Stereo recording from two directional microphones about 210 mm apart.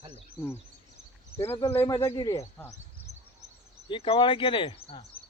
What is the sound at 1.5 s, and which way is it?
Speech, 15° left (ahead or behind).